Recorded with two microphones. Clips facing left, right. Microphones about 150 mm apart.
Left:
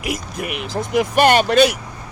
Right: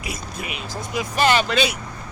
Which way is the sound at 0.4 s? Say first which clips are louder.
Left 8 dB; 60° left (ahead or behind).